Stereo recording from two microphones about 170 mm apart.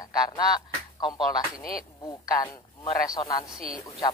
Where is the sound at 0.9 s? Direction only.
25° left (ahead or behind).